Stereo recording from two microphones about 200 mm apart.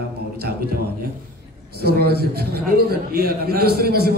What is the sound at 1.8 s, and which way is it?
A man's voice, 50° right (ahead or behind).